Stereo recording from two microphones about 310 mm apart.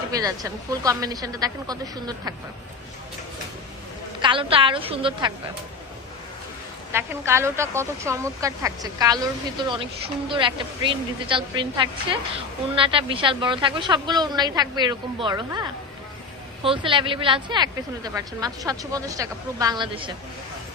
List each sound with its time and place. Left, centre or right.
0.1 s speech: centre
4.2 s speech: centre
6.9 s speech: centre
16.6 s speech: centre